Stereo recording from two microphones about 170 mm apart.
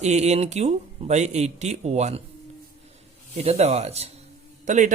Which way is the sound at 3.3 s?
40° right (ahead or behind).